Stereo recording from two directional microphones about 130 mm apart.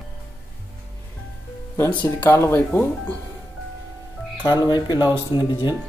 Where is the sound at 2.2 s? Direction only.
20° left (ahead or behind).